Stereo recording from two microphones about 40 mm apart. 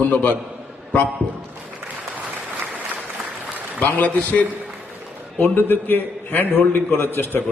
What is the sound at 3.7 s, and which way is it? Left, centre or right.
Speech, left.